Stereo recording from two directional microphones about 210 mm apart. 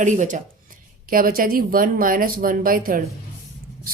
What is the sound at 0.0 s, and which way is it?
A woman's voice, 35° right (ahead or behind).